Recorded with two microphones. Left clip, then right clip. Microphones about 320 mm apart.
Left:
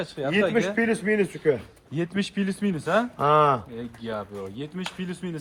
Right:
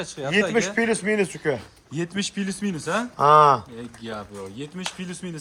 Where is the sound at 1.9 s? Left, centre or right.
Centre.